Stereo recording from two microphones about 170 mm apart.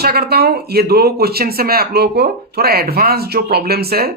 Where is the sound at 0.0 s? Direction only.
65° right (ahead or behind).